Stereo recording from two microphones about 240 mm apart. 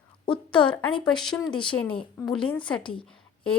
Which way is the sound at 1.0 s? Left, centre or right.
Centre.